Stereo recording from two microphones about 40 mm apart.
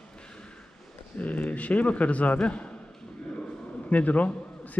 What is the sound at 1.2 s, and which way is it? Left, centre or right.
A man's voice, left.